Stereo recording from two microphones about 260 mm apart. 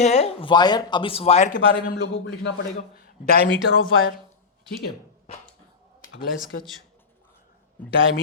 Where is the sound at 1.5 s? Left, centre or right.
Left.